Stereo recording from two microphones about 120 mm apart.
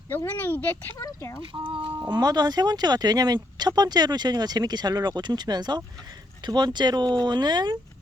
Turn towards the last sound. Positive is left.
turn(degrees=-35)  # may be behind; listen again after turning